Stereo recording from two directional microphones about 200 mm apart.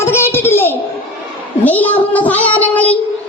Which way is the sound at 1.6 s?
10° left (ahead or behind).